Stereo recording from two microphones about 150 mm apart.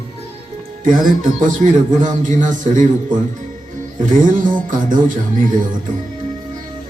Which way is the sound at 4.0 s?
60° right (ahead or behind).